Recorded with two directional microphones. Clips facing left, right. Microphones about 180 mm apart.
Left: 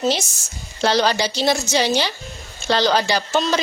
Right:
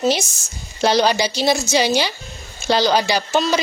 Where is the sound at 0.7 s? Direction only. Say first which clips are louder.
Right 2 dB; 15° right (ahead or behind).